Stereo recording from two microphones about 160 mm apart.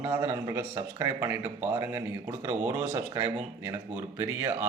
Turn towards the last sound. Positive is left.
turn(degrees=-10)  # may be behind; listen again after turning